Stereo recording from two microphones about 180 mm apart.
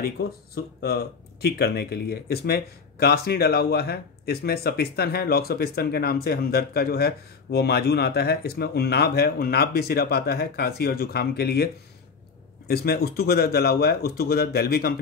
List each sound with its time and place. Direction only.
0.7 s speech: 60° left (ahead or behind)